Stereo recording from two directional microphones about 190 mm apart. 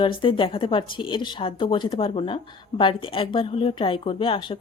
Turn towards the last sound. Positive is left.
turn(degrees=30)  # may be behind; listen again after turning